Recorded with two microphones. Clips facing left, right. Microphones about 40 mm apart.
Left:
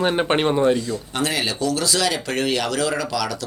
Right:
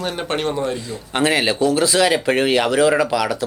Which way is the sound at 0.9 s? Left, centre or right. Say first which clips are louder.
Right 5 dB; right.